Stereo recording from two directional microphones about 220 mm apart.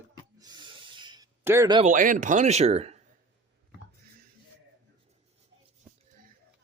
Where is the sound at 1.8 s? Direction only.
35° right (ahead or behind).